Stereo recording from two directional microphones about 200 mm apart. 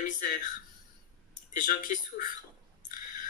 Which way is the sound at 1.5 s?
45° left (ahead or behind).